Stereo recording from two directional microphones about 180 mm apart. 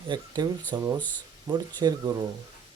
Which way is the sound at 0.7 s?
25° right (ahead or behind).